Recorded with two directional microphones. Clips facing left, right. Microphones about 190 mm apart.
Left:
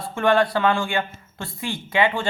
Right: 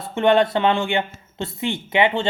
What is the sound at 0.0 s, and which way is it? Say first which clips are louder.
Speech: right 3 dB; 20° right (ahead or behind).